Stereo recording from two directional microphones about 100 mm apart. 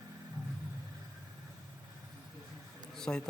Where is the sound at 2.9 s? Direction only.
5° left (ahead or behind).